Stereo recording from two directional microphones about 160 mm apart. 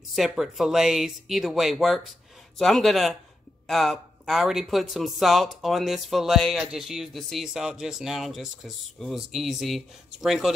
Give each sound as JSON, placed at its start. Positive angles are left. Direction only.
{"t": 0.1, "sound": "speech", "side_deg": 0}